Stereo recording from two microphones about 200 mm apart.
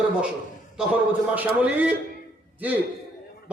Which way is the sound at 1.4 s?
5° right (ahead or behind).